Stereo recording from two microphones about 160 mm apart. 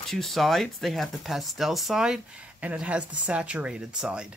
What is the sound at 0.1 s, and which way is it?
Speech, centre (ahead or behind).